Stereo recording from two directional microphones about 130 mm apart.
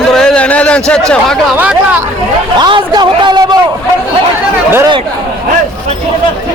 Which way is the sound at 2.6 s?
35° right (ahead or behind).